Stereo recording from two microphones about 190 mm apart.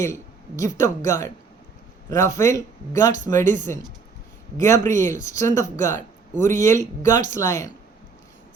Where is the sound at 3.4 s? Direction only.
40° right (ahead or behind).